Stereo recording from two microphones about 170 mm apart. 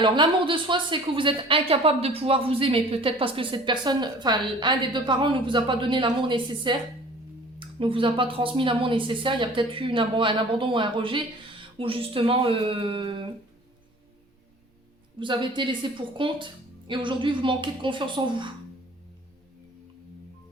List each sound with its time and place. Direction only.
0.0 s speech: 30° right (ahead or behind)
15.2 s speech: 30° right (ahead or behind)